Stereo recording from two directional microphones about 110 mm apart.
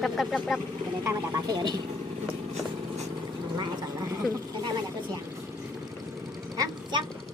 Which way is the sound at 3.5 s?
40° right (ahead or behind).